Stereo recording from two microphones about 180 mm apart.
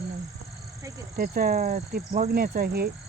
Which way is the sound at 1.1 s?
55° right (ahead or behind).